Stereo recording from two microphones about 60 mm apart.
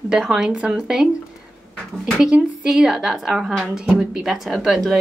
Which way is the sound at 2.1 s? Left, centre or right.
Centre.